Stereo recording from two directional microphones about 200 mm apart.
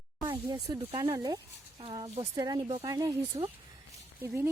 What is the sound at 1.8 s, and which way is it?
A woman's voice, 25° right (ahead or behind).